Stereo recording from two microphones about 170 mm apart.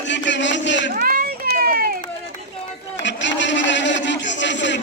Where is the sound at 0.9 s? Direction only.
60° right (ahead or behind).